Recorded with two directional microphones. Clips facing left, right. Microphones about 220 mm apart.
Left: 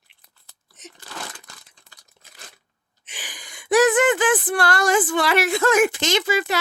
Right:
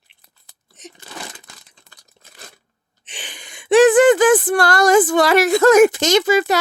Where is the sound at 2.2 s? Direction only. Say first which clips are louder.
Right 4 dB; 30° right (ahead or behind).